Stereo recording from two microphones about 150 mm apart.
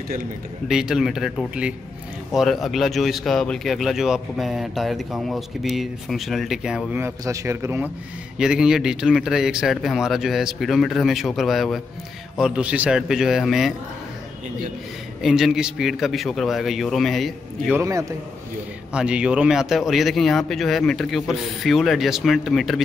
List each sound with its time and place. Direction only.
0.7 s speech: 5° right (ahead or behind)
7.0 s speech: 20° right (ahead or behind)
8.4 s speech: 5° right (ahead or behind)
15.2 s speech: centre (ahead or behind)
18.9 s speech: 5° right (ahead or behind)